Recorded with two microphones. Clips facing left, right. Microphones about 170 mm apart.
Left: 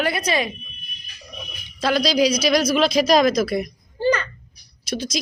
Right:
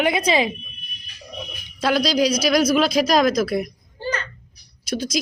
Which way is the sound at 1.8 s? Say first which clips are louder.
Even; 5° right (ahead or behind).